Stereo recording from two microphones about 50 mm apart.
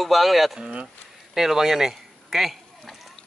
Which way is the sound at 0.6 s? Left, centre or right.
Centre.